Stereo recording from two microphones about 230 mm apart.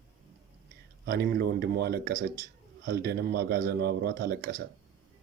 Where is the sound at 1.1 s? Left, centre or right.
Right.